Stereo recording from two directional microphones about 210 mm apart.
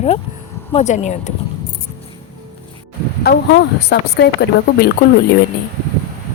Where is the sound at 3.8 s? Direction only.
50° left (ahead or behind).